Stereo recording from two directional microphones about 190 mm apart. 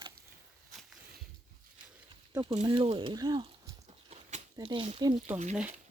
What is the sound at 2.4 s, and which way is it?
Speech, 30° right (ahead or behind).